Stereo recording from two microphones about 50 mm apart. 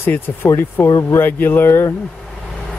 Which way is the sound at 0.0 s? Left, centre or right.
Left.